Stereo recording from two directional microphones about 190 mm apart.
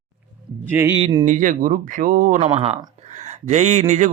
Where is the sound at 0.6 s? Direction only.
10° right (ahead or behind).